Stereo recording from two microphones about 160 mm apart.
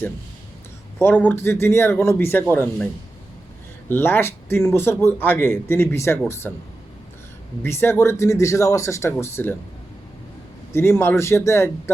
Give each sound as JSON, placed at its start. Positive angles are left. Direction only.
{"t": 0.9, "sound": "speech", "side_deg": 15}
{"t": 3.8, "sound": "speech", "side_deg": 15}
{"t": 7.6, "sound": "speech", "side_deg": 15}
{"t": 10.8, "sound": "speech", "side_deg": 15}